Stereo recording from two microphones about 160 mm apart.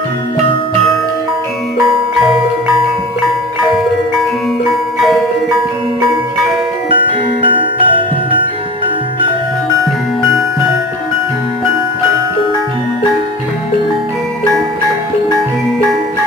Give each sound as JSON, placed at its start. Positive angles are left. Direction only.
{"t": 7.4, "sound": "music", "side_deg": -30}